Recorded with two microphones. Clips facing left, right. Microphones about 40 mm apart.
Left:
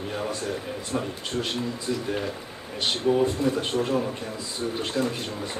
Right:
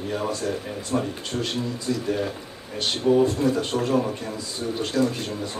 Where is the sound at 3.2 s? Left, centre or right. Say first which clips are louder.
Right 2 dB; left.